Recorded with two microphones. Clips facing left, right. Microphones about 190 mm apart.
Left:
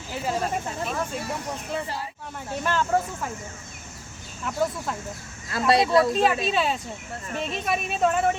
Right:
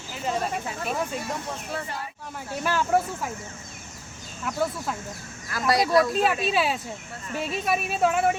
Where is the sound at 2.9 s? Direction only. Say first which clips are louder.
Right 2 dB; 10° right (ahead or behind).